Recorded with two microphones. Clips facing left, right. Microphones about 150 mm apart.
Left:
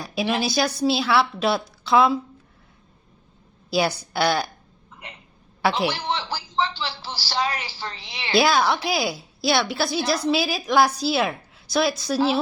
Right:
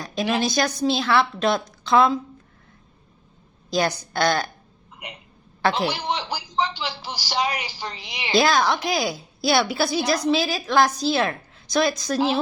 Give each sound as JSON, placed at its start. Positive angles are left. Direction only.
{"t": 0.0, "sound": "a woman's voice", "side_deg": 10}
{"t": 3.7, "sound": "a woman's voice", "side_deg": 10}
{"t": 5.0, "sound": "speech", "side_deg": -15}
{"t": 8.4, "sound": "a woman's voice", "side_deg": 10}